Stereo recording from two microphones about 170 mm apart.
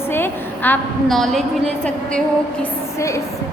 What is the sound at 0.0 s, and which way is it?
A woman's voice, 10° left (ahead or behind).